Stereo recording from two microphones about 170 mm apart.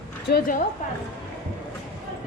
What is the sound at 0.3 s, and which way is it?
Speech, 60° left (ahead or behind).